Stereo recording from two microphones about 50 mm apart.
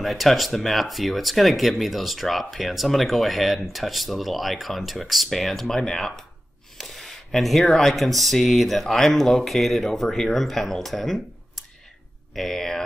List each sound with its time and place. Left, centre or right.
0.0 s speech: centre
12.4 s speech: centre